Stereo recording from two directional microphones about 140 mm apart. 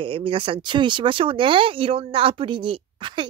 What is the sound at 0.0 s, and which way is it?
Speech, 40° right (ahead or behind).